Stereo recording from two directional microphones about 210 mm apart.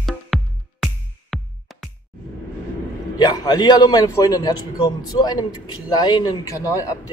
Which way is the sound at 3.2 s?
20° left (ahead or behind).